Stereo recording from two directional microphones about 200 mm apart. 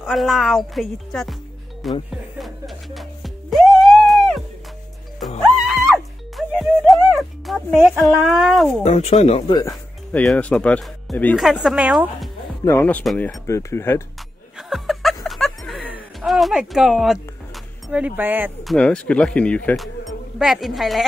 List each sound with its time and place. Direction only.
0.0 s speech: centre (ahead or behind)
2.0 s music: centre (ahead or behind)
3.7 s a sound: centre (ahead or behind)
5.7 s music: centre (ahead or behind)
8.8 s speech: 35° left (ahead or behind)
9.7 s speech: 5° left (ahead or behind)
12.6 s speech: 10° left (ahead or behind)
13.5 s speech: 15° left (ahead or behind)
14.6 s chuckle: centre (ahead or behind)
15.2 s a sound: centre (ahead or behind)
17.8 s speech: 5° right (ahead or behind)